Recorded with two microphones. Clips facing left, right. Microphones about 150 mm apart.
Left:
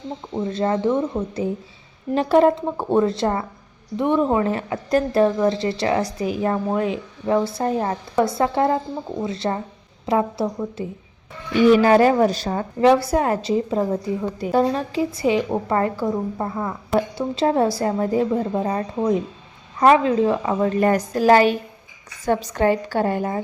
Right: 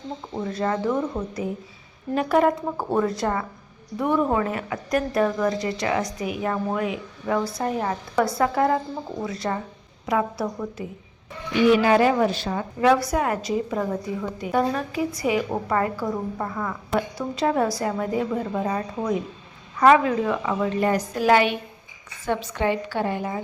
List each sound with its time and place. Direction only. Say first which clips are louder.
0.4 s speech: left 4 dB; 25° left (ahead or behind)
2.1 s speech: left 4 dB; 30° left (ahead or behind)
11.7 s a woman's voice: left 4 dB; 40° left (ahead or behind)
20.7 s a woman's voice: left 5 dB; 50° left (ahead or behind)